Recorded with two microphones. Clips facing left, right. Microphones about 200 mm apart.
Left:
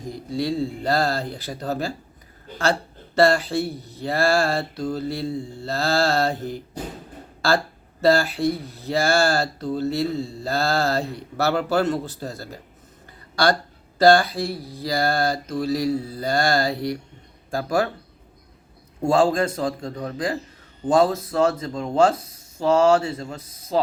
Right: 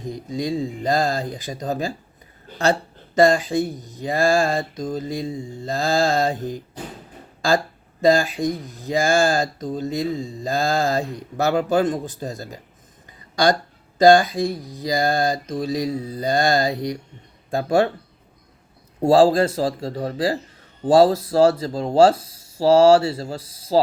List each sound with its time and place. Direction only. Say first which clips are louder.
0.0 s speech: even; 20° right (ahead or behind)
3.2 s speech: right 2 dB; 15° right (ahead or behind)
8.0 s speech: right 1 dB; 15° right (ahead or behind)
13.1 s a sound: right 2 dB; 15° right (ahead or behind)
14.0 s speech: right 2 dB; 15° right (ahead or behind)
14.7 s mantra: right 2 dB; 15° right (ahead or behind)
19.0 s speech: right 4 dB; 35° right (ahead or behind)